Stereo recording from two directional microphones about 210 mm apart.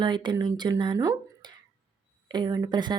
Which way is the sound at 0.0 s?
20° right (ahead or behind).